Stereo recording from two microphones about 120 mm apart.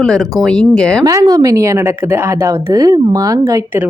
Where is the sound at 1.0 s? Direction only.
30° right (ahead or behind).